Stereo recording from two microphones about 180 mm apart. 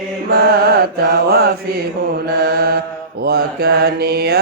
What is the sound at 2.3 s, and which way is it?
Mantra, 60° right (ahead or behind).